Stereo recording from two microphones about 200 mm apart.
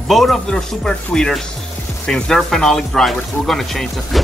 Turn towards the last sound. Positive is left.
turn(degrees=0)  # may be behind; listen again after turning